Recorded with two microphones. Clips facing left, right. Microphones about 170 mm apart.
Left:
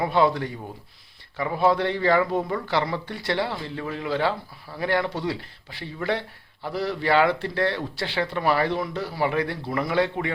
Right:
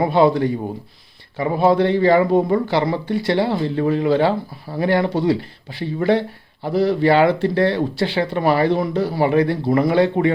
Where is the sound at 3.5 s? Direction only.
35° right (ahead or behind).